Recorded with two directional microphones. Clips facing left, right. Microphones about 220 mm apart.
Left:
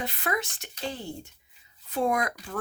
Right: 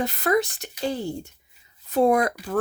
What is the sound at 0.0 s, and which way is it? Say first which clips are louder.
Speech: right 9 dB; 40° right (ahead or behind).